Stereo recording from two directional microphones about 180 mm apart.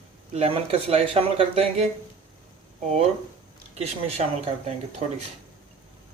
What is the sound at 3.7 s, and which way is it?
Speech, 35° right (ahead or behind).